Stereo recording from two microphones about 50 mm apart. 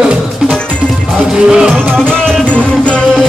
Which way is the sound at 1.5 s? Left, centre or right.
Centre.